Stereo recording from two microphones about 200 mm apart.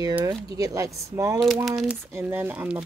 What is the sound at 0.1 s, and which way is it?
Speech, 15° right (ahead or behind).